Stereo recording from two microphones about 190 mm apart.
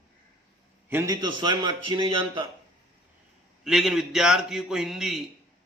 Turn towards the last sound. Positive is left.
turn(degrees=0)  # may be behind; listen again after turning